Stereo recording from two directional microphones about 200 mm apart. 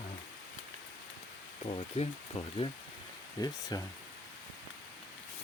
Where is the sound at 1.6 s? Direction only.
30° left (ahead or behind).